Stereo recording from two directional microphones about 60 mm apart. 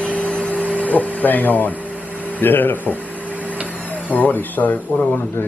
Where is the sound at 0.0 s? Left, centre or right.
Left.